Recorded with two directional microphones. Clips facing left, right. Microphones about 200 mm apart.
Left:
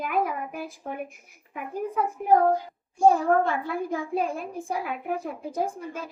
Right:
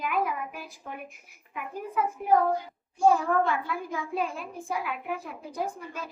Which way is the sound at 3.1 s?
45° left (ahead or behind).